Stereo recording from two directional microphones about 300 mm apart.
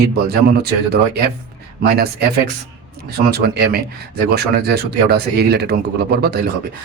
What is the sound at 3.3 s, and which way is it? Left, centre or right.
A man's voice, right.